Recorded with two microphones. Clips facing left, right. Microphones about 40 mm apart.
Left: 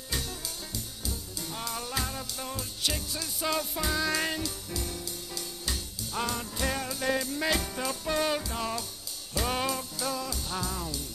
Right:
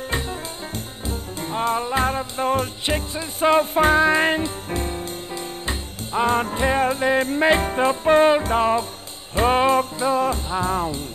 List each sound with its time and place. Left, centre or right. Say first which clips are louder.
1.0 s music: right 11 dB; right